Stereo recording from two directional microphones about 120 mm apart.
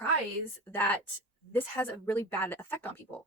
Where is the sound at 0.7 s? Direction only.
15° left (ahead or behind).